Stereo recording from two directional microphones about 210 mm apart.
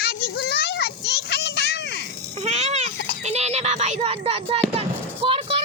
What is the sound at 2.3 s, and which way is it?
Cat, 30° right (ahead or behind).